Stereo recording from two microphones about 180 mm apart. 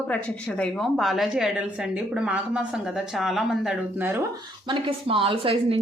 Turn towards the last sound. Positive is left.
turn(degrees=-30)  # may be behind; listen again after turning